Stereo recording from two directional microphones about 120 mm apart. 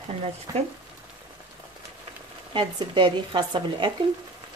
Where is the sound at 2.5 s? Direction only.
40° right (ahead or behind).